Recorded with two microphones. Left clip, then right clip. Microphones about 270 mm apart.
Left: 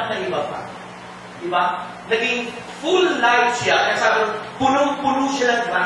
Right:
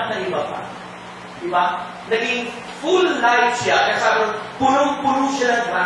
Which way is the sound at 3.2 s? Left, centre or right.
Centre.